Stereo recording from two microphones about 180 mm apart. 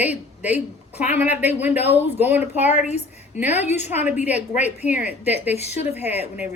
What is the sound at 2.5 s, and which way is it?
Speech, 40° left (ahead or behind).